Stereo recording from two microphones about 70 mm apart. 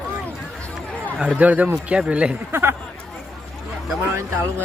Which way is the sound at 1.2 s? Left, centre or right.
Centre.